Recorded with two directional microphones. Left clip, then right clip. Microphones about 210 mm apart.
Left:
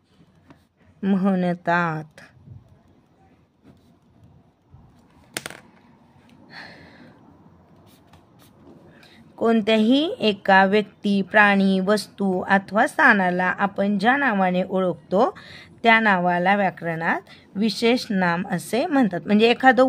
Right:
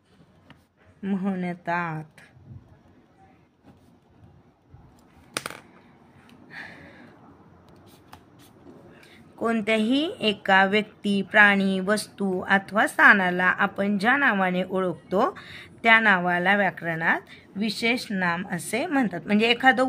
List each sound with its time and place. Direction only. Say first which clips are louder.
1.0 s speech: left 7 dB; 40° left (ahead or behind)
5.3 s a sound: even; 5° left (ahead or behind)
6.5 s gasp: even; 30° left (ahead or behind)
8.9 s a woman's voice: left 8 dB; 35° left (ahead or behind)